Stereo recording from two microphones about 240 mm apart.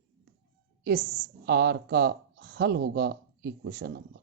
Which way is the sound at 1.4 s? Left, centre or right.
Right.